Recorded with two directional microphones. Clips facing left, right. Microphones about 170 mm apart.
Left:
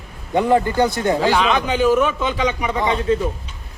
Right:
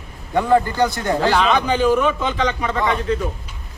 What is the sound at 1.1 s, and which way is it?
A man's voice, centre (ahead or behind).